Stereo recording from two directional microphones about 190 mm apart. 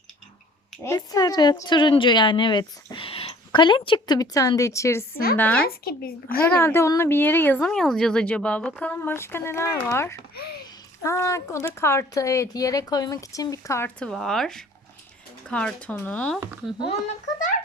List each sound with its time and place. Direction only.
0.9 s a woman's voice: 20° left (ahead or behind)
10.3 s a sound: 55° left (ahead or behind)
11.0 s speech: 15° left (ahead or behind)